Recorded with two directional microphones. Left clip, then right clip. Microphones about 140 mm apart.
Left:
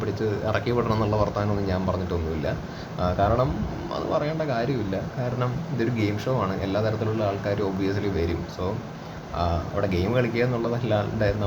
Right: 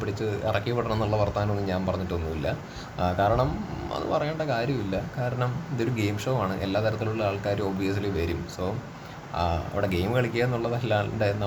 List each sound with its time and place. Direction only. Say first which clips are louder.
0.2 s a man's voice: left 1 dB; 5° right (ahead or behind)
3.0 s a man's voice: left 1 dB; 15° right (ahead or behind)
9.4 s a man's voice: left 1 dB; 15° right (ahead or behind)